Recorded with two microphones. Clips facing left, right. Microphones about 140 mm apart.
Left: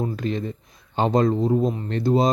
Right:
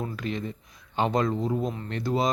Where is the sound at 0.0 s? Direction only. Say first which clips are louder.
Left 6 dB; 30° left (ahead or behind).